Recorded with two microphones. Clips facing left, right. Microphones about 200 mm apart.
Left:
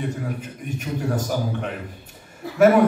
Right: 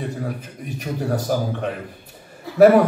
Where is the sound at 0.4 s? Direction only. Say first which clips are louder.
Left 1 dB; 35° right (ahead or behind).